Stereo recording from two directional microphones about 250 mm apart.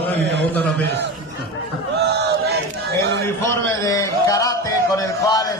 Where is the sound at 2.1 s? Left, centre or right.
Right.